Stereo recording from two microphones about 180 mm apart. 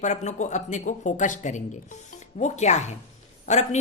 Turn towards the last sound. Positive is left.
turn(degrees=40)  # may be behind; listen again after turning